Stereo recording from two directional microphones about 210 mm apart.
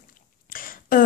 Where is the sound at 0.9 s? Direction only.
40° left (ahead or behind).